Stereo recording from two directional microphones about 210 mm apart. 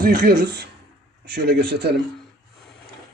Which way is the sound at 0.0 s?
45° right (ahead or behind).